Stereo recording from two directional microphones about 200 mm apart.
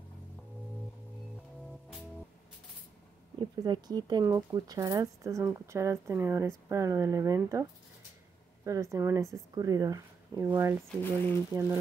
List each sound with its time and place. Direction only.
3.3 s speech: 20° right (ahead or behind)
8.6 s speech: 15° right (ahead or behind)
10.9 s speech: 10° left (ahead or behind)